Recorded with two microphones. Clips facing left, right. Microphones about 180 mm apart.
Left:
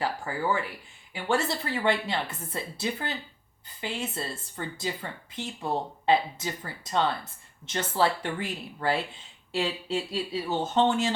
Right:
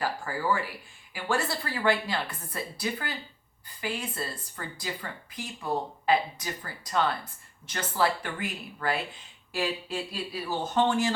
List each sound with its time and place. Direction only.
0.3 s speech: 20° left (ahead or behind)